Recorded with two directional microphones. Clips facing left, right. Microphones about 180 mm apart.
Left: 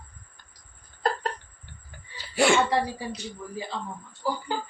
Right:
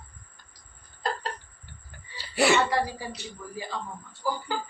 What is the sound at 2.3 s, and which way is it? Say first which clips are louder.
Speech: left 1 dB; centre (ahead or behind).